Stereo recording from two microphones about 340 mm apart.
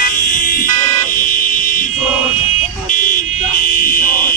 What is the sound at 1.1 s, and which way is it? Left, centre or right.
Vehicle, left.